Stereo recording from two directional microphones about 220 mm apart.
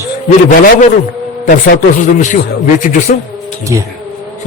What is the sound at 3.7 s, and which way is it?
Speech, 15° right (ahead or behind).